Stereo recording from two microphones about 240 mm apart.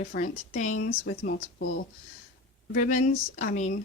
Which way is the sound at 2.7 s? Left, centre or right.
Left.